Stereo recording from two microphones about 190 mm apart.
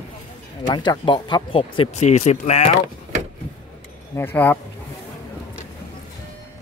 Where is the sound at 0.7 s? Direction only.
25° left (ahead or behind).